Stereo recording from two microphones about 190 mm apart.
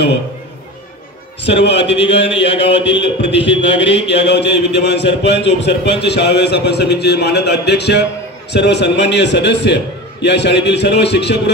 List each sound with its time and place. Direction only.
1.4 s a man's voice: 65° left (ahead or behind)